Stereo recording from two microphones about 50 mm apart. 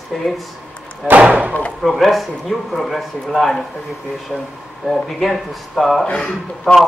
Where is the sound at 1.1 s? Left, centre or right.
Right.